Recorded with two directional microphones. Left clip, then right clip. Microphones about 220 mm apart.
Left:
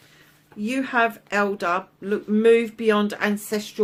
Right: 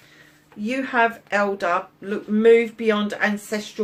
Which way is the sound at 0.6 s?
45° left (ahead or behind).